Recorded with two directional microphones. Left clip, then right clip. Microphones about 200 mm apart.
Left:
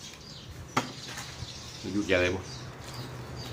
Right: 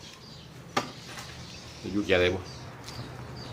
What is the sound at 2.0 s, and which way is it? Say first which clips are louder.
Speech: right 2 dB; 15° right (ahead or behind).